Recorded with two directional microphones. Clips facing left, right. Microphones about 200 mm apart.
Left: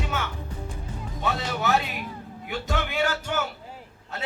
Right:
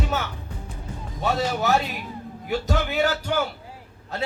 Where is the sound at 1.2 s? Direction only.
40° right (ahead or behind).